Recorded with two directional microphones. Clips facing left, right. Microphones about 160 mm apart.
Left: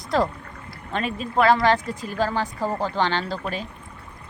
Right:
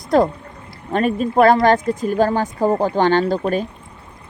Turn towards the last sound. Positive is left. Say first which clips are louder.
# right 10 dB
turn(degrees=-50)  # may be behind; listen again after turning